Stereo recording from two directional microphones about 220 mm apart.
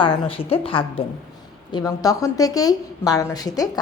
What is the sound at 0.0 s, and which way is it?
A woman's voice, 25° left (ahead or behind).